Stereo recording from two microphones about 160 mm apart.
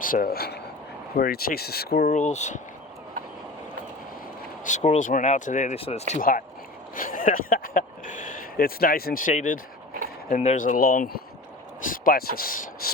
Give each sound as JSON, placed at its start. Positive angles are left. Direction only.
{"t": 0.0, "sound": "speech", "side_deg": 60}
{"t": 1.1, "sound": "speech", "side_deg": 70}
{"t": 4.6, "sound": "speech", "side_deg": 45}
{"t": 6.9, "sound": "speech", "side_deg": 60}